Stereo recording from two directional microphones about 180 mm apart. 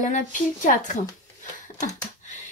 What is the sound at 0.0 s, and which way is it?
Speech, 45° left (ahead or behind).